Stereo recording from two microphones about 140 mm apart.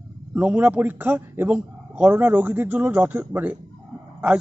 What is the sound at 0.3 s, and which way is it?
A man's voice, 10° right (ahead or behind).